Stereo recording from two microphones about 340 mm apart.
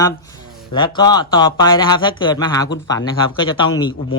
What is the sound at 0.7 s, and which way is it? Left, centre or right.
Speech, centre.